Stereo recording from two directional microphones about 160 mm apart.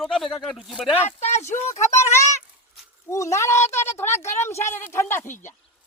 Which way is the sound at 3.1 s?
20° left (ahead or behind).